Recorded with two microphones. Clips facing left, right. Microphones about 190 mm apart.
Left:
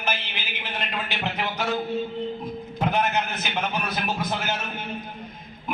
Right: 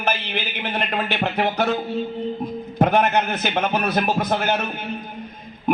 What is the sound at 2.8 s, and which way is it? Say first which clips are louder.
A man's voice: right 6 dB; 55° right (ahead or behind).